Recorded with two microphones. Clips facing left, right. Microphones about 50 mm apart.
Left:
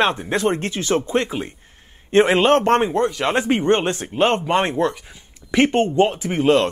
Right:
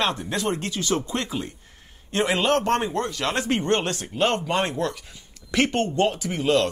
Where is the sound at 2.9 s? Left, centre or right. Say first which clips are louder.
Left 6 dB; left.